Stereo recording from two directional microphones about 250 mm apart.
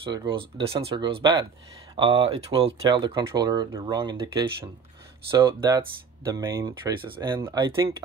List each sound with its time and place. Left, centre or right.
0.1 s speech: centre